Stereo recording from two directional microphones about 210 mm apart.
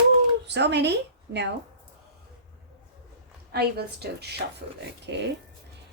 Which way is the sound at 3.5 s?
50° right (ahead or behind).